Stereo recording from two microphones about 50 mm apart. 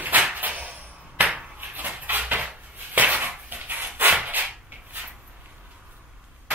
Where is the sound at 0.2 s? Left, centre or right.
Right.